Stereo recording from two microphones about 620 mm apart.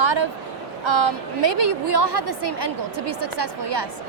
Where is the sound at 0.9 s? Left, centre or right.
Right.